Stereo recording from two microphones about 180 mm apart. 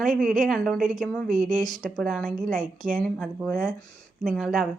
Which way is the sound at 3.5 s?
50° right (ahead or behind).